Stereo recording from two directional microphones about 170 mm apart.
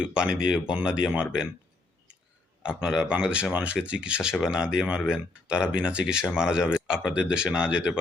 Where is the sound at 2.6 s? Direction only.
5° right (ahead or behind).